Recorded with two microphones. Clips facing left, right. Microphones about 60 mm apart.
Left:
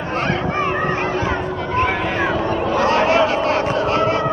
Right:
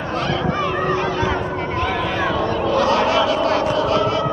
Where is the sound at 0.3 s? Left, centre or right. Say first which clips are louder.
Even; left.